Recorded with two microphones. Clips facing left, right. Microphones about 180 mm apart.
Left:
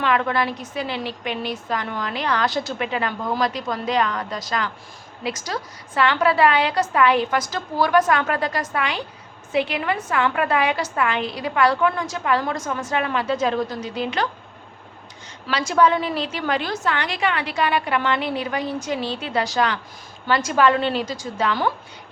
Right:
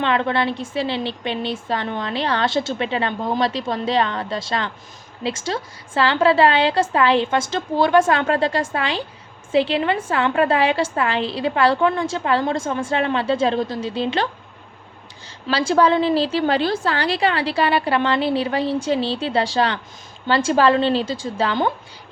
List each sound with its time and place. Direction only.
0.0 s a woman's voice: 25° right (ahead or behind)
15.4 s a woman's voice: 30° right (ahead or behind)